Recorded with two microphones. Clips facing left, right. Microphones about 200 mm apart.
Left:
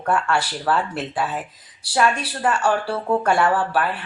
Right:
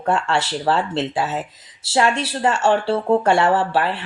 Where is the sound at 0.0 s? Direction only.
25° right (ahead or behind).